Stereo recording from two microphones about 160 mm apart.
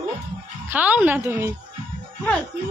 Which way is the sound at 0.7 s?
10° right (ahead or behind).